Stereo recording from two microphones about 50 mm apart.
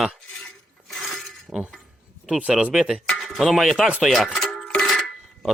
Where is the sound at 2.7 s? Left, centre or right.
Centre.